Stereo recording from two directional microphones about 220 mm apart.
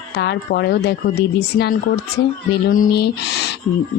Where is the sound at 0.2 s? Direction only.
50° left (ahead or behind).